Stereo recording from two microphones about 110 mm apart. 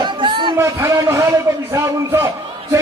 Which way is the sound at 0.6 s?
30° right (ahead or behind).